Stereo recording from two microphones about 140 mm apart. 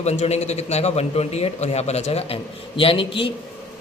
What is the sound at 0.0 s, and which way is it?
Speech, 50° left (ahead or behind).